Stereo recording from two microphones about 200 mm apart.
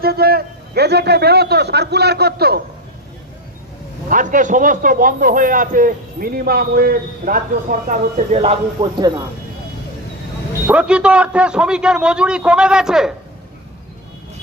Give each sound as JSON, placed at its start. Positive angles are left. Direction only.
{"t": 0.0, "sound": "a man's voice", "side_deg": -50}
{"t": 4.1, "sound": "a man's voice", "side_deg": -40}
{"t": 10.7, "sound": "a man's voice", "side_deg": -5}